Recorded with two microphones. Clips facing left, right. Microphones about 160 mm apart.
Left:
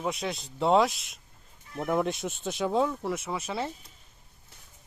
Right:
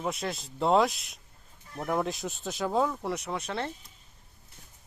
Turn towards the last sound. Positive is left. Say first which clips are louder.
# left 1 dB
turn(degrees=5)  # may be behind; listen again after turning